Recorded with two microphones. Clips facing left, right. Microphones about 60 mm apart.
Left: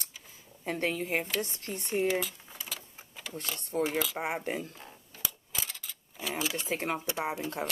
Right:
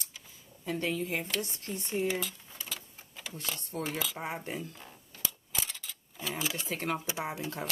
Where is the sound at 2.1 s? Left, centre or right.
Centre.